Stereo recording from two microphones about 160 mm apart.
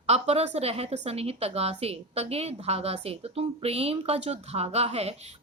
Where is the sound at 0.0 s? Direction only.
40° right (ahead or behind).